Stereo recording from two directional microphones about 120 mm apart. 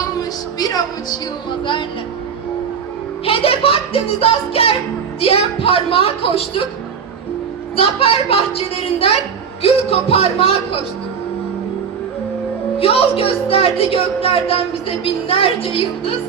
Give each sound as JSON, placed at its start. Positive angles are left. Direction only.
{"t": 0.2, "sound": "music", "side_deg": 30}
{"t": 3.2, "sound": "a woman's voice", "side_deg": 50}
{"t": 7.8, "sound": "a woman's voice", "side_deg": 50}
{"t": 12.8, "sound": "a woman's voice", "side_deg": 55}